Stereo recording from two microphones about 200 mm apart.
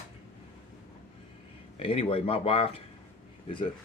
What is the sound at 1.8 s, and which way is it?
Speech, 30° left (ahead or behind).